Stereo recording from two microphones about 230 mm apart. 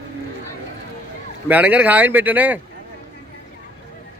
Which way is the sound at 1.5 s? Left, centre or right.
Centre.